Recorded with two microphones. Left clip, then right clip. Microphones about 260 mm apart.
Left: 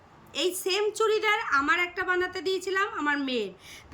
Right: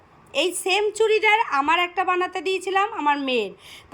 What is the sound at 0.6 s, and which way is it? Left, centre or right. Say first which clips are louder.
A woman's voice: right 5 dB; centre.